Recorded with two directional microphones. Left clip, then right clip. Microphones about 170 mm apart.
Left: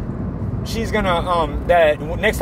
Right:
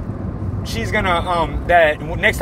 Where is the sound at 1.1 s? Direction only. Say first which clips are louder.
Even; 15° left (ahead or behind).